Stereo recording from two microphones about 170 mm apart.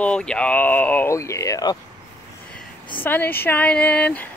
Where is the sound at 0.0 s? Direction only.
5° left (ahead or behind); by 1.8 s 20° left (ahead or behind).